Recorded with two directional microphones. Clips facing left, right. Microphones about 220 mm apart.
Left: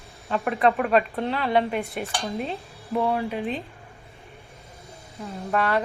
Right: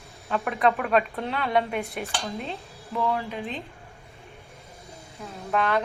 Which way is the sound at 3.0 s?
35° left (ahead or behind).